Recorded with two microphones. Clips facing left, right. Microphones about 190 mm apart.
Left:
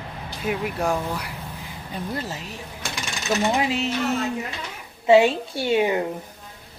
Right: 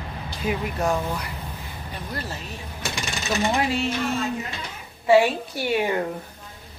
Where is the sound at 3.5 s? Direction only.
15° left (ahead or behind).